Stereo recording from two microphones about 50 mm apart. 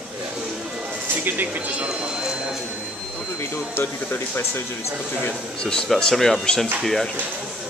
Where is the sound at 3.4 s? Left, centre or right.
Left.